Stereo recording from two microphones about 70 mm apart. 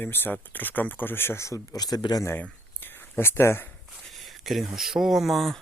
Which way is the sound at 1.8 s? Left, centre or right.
Left.